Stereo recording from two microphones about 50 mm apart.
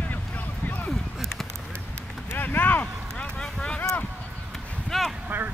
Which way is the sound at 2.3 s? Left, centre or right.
Left.